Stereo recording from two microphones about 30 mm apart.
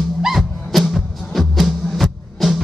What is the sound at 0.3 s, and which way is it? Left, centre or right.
Music, centre.